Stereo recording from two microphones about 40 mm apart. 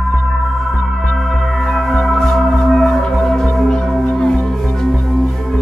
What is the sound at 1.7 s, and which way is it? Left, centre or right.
Music, centre.